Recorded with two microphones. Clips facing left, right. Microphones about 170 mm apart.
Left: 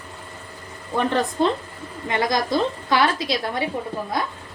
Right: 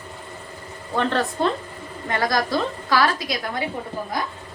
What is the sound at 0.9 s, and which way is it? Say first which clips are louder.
A woman's voice: left 1 dB; 15° left (ahead or behind).